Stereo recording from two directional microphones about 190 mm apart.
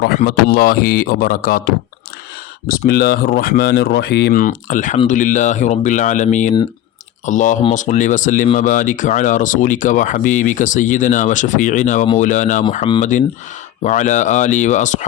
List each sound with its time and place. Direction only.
0.3 s speech: 50° left (ahead or behind)
4.4 s speech: 45° left (ahead or behind)